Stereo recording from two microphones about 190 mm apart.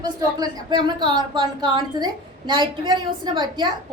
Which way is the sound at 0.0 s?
20° right (ahead or behind).